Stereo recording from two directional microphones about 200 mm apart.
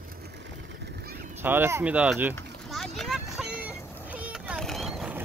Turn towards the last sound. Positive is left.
turn(degrees=0)  # may be behind; listen again after turning